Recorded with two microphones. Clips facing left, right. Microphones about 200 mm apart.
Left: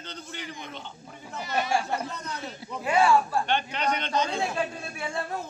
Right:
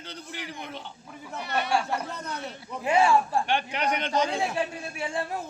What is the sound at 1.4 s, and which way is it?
Speech, 65° right (ahead or behind).